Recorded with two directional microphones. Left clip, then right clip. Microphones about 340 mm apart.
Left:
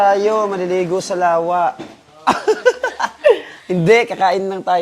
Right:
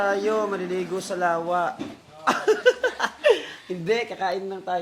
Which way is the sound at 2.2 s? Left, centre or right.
Left.